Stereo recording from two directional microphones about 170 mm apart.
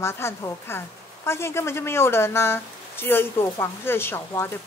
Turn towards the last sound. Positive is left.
turn(degrees=15)  # may be behind; listen again after turning